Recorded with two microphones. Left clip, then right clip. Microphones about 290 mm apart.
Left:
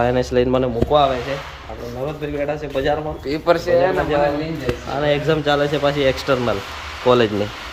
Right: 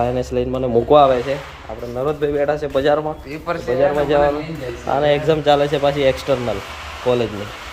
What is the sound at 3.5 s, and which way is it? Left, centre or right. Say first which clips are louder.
Speech: left 7 dB; left.